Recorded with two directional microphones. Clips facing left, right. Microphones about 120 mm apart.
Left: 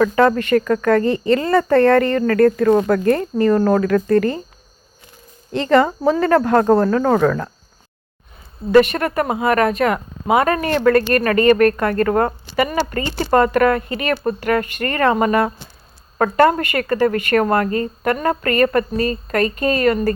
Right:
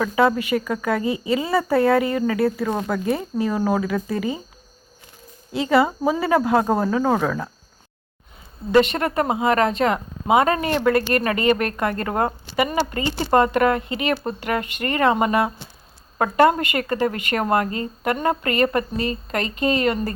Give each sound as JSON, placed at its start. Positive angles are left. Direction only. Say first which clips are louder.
{"t": 0.0, "sound": "speech", "louder": "left 4 dB", "side_deg": -10}
{"t": 5.5, "sound": "speech", "louder": "left 3 dB", "side_deg": -10}
{"t": 8.7, "sound": "a woman's voice", "louder": "left 4 dB", "side_deg": -25}